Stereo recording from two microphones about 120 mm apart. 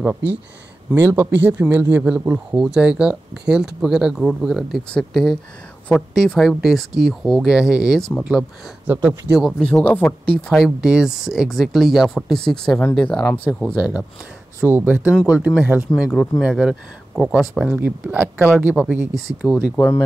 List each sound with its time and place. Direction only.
0.9 s speech: 20° right (ahead or behind); by 10.6 s 10° left (ahead or behind)
10.6 s speech: 5° right (ahead or behind); by 13.5 s 15° left (ahead or behind)
13.7 s speech: 10° right (ahead or behind)
16.1 s speech: 5° left (ahead or behind); by 19.0 s 15° right (ahead or behind)
19.1 s speech: centre (ahead or behind)